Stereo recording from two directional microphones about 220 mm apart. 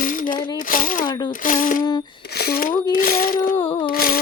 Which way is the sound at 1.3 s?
40° left (ahead or behind).